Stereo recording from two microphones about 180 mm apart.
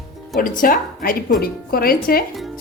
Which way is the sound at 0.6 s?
50° left (ahead or behind).